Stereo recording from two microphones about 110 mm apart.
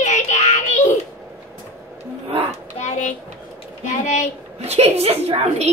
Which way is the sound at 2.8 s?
90° left.